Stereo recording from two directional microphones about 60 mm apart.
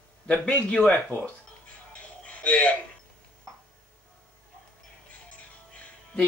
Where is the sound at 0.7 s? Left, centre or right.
Centre.